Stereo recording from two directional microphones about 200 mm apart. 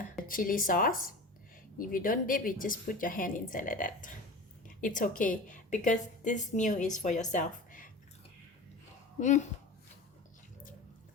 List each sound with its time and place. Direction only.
0.3 s a woman's voice: 45° left (ahead or behind)
9.2 s a woman's voice: 35° left (ahead or behind)